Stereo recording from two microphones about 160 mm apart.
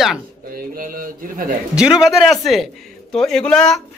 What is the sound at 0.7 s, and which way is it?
Speech, 60° right (ahead or behind).